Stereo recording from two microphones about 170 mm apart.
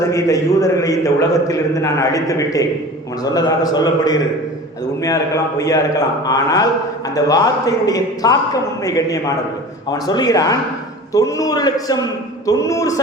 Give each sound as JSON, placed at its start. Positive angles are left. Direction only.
{"t": 0.1, "sound": "a man's voice", "side_deg": 20}